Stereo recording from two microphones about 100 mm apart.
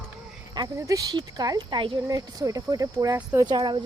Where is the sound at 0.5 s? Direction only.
40° right (ahead or behind); by 2.0 s 55° right (ahead or behind).